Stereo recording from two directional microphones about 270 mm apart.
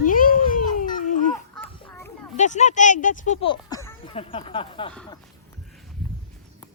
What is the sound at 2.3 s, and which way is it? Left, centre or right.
Speech, left.